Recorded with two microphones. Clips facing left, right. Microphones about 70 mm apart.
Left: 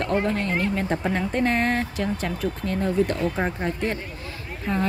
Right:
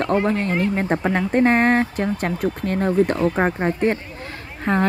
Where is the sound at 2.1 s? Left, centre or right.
Right.